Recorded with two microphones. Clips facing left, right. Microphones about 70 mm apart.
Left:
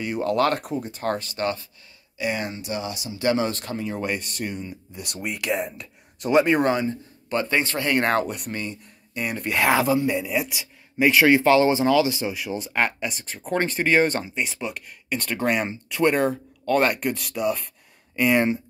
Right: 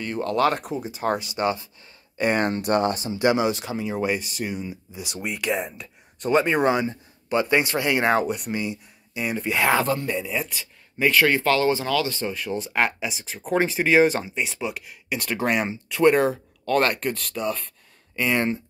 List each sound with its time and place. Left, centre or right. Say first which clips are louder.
0.0 s speech: even; centre
2.1 s speech: right 5 dB; right
3.2 s speech: right 1 dB; centre
7.2 s speech: right 2 dB; centre